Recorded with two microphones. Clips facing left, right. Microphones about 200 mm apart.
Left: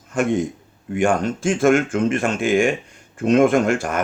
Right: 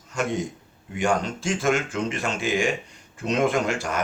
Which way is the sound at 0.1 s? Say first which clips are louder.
Left 7 dB; 50° left (ahead or behind).